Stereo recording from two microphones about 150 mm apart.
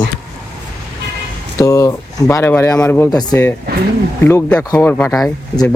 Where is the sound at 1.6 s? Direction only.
20° left (ahead or behind).